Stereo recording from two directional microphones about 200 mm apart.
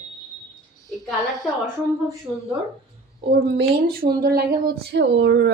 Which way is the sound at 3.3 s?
55° right (ahead or behind).